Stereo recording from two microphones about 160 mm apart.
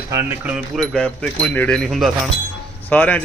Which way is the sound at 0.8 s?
5° left (ahead or behind).